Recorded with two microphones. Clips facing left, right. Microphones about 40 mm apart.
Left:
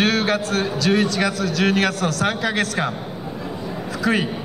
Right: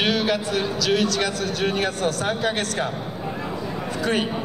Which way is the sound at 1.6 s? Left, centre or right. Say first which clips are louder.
Left 3 dB; left.